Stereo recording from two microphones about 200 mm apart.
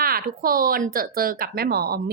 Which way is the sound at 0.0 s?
45° right (ahead or behind).